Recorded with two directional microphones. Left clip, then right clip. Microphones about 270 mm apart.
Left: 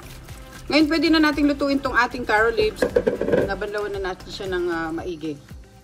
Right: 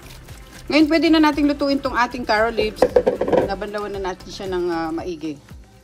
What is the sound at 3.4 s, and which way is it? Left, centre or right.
A woman's voice, right.